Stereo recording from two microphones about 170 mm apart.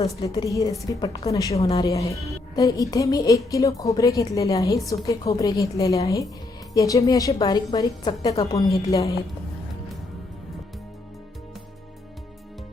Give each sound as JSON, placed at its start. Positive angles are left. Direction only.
{"t": 0.2, "sound": "speech", "side_deg": 20}